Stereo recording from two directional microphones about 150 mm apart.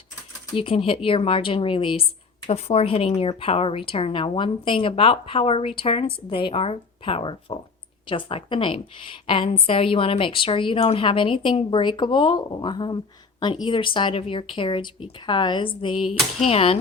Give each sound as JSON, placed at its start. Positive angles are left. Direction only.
{"t": 0.5, "sound": "a woman's voice", "side_deg": 35}
{"t": 16.0, "sound": "a sound", "side_deg": 0}
{"t": 16.5, "sound": "a woman's voice", "side_deg": 40}